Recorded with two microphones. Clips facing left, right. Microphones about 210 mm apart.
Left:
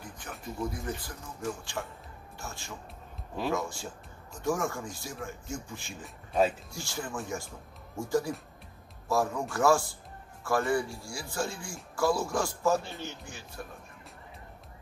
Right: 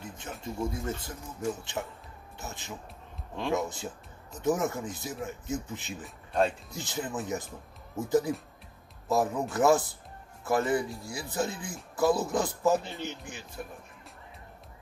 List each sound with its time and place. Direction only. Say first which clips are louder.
0.0 s speech: right 3 dB; 25° right (ahead or behind)
6.0 s speech: left 1 dB; 5° left (ahead or behind)
6.7 s speech: right 3 dB; 20° right (ahead or behind)